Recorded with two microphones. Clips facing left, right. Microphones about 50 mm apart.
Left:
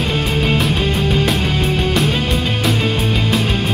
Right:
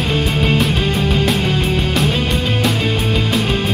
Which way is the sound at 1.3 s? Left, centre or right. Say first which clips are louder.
Right 1 dB; centre.